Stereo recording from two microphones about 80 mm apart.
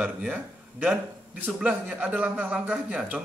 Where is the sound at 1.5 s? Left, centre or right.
Centre.